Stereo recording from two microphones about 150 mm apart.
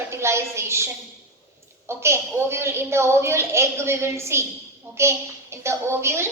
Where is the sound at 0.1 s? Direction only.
20° right (ahead or behind).